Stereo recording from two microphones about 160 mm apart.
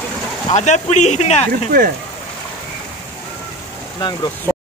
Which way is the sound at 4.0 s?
25° left (ahead or behind).